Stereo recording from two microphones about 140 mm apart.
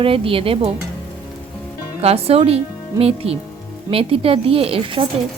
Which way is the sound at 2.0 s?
45° right (ahead or behind).